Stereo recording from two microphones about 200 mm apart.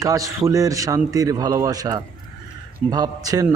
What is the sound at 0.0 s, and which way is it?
A man's voice, 15° right (ahead or behind).